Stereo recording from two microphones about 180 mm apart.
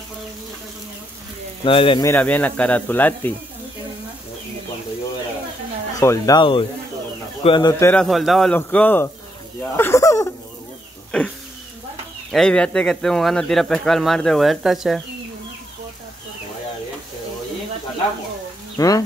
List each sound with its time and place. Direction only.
1.6 s speech: 30° left (ahead or behind)
2.0 s speech: 10° left (ahead or behind)
5.9 s speech: 20° left (ahead or behind)
7.8 s speech: 5° left (ahead or behind)
11.1 s a sound: 5° left (ahead or behind)
12.3 s speech: 5° left (ahead or behind)
18.8 s speech: 20° left (ahead or behind)